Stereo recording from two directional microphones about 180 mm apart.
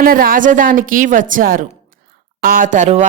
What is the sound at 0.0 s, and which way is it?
A woman's voice, 50° right (ahead or behind).